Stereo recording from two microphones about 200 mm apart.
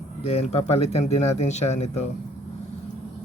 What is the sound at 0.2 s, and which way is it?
Speech, 30° left (ahead or behind).